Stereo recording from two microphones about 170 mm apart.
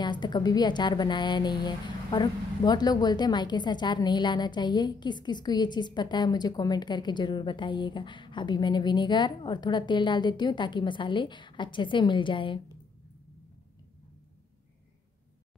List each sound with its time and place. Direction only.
0.0 s a woman's voice: 25° left (ahead or behind)